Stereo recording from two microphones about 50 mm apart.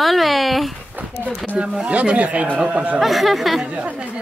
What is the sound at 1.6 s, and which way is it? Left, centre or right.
Speech, right.